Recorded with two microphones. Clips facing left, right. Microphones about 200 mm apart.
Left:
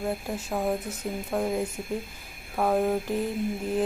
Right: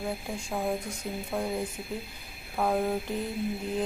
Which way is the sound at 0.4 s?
5° left (ahead or behind).